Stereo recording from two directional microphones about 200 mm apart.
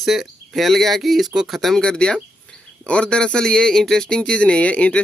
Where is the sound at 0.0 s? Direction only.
Centre (ahead or behind).